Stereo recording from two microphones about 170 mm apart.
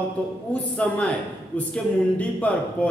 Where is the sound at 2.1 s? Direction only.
10° left (ahead or behind).